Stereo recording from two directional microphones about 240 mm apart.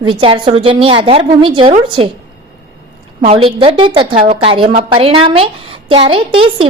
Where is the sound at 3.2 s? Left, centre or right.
Right.